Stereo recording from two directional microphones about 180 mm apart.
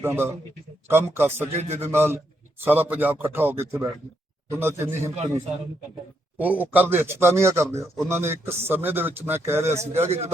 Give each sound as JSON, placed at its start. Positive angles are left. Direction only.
{"t": 0.0, "sound": "a man's voice", "side_deg": -10}
{"t": 6.4, "sound": "a man's voice", "side_deg": -10}
{"t": 10.1, "sound": "a man's voice", "side_deg": -35}